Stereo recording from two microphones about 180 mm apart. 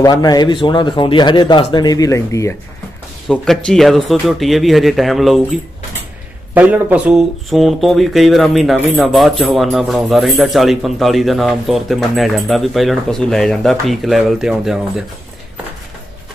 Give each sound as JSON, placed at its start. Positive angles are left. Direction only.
{"t": 0.0, "sound": "a man's voice", "side_deg": 20}
{"t": 3.3, "sound": "speech", "side_deg": 0}